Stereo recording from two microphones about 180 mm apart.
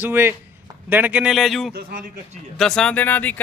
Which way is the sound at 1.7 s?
50° right (ahead or behind).